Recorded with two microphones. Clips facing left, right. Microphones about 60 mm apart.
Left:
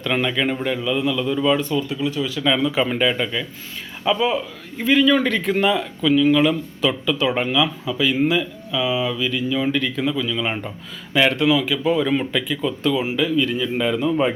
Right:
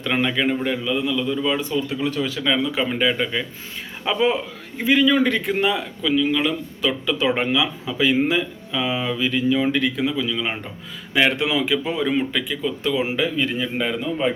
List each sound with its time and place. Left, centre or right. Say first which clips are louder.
0.0 s speech: even; centre
2.0 s speech: even; right
2.4 s speech: left 3 dB; centre
4.0 s speech: left 1 dB; centre
7.0 s speech: even; centre
7.9 s speech: even; right; by 10.7 s centre
11.1 s speech: left 2 dB; centre
11.9 s speech: left 3 dB; centre
12.9 s speech: left 1 dB; centre
13.7 s speech: left 6 dB; centre